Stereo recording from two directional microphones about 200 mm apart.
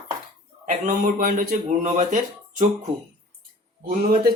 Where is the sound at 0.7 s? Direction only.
40° right (ahead or behind).